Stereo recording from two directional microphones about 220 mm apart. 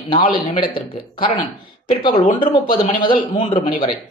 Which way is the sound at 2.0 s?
25° left (ahead or behind).